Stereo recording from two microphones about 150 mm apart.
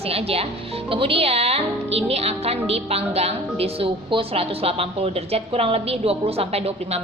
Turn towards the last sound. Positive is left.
turn(degrees=-45)  # may be behind; listen again after turning